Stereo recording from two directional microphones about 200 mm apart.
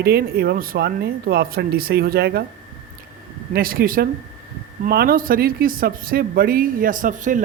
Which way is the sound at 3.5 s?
45° right (ahead or behind).